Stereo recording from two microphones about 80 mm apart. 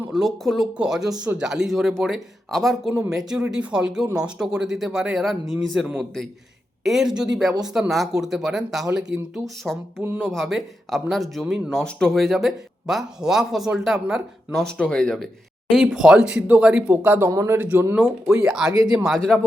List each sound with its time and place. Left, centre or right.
0.1 s speech: centre
14.8 s speech: centre
16.9 s speech: right
17.3 s speech: right
17.6 s speech: right
18.3 s speech: centre
19.0 s speech: centre